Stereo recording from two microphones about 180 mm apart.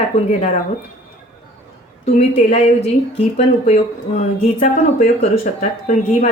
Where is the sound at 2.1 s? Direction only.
35° left (ahead or behind).